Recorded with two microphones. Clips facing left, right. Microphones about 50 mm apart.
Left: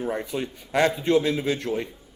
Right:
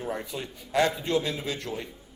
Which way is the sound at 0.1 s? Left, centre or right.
Left.